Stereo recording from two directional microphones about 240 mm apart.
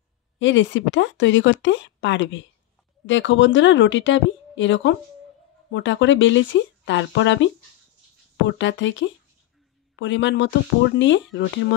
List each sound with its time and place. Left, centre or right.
0.4 s speech: left
8.5 s speech: left